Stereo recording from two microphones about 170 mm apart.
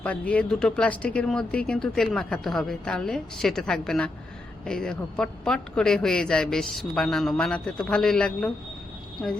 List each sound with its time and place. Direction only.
0.0 s speech: 10° left (ahead or behind)